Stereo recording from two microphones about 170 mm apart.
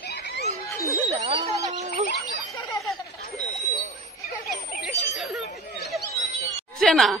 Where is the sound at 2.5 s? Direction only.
20° left (ahead or behind).